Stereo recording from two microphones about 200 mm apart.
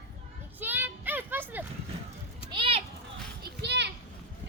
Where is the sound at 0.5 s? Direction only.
10° right (ahead or behind).